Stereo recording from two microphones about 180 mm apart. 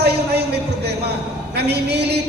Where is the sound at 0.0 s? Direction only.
65° right (ahead or behind).